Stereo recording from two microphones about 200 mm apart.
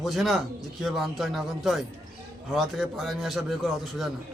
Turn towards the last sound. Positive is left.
turn(degrees=0)  # may be behind; listen again after turning